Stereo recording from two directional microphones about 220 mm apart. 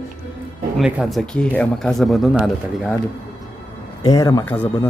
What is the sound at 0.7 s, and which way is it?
Speech, 5° right (ahead or behind).